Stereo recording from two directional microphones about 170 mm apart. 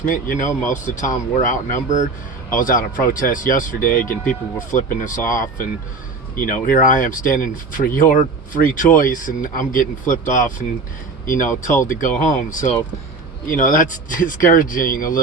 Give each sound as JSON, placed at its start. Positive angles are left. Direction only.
{"t": 0.1, "sound": "speech", "side_deg": 50}
{"t": 4.1, "sound": "speech", "side_deg": 10}
{"t": 4.7, "sound": "speech", "side_deg": 50}